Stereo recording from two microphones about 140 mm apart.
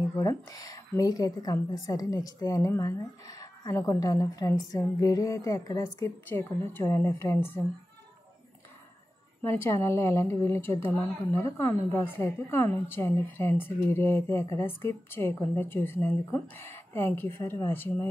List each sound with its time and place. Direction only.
0.2 s a woman's voice: 25° left (ahead or behind)
6.2 s a woman's voice: 15° left (ahead or behind)
9.4 s a woman's voice: 15° left (ahead or behind)